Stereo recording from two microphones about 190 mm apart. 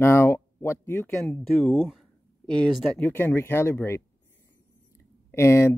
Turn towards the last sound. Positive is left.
turn(degrees=10)  # may be behind; listen again after turning